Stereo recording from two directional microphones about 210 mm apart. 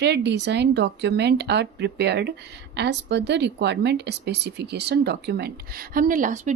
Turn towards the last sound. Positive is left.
turn(degrees=-35)  # may be behind; listen again after turning